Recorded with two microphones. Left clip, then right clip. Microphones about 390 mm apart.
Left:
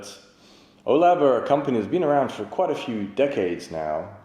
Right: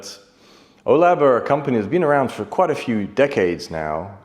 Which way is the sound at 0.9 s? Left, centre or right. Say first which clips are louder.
Right 4 dB; right.